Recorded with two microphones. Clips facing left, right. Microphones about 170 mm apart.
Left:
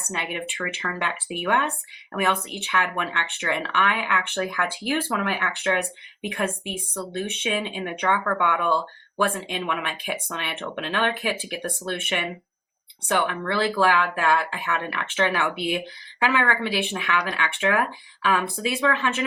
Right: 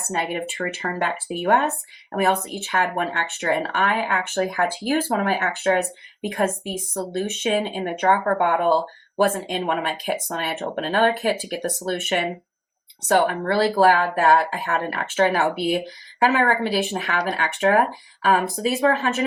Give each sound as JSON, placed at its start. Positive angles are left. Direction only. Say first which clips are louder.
{"t": 0.1, "sound": "speech", "louder": "right 5 dB", "side_deg": -40}